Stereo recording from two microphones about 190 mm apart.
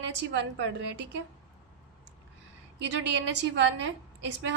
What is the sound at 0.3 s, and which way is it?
Speech, 70° right (ahead or behind).